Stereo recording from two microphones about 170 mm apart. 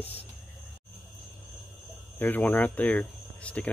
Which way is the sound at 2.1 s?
10° left (ahead or behind).